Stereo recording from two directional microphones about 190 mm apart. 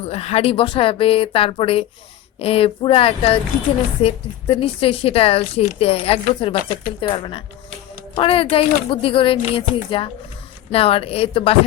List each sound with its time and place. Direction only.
0.0 s a woman's voice: 35° left (ahead or behind)